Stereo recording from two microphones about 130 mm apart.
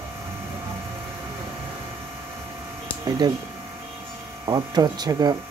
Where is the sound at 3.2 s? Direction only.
30° right (ahead or behind).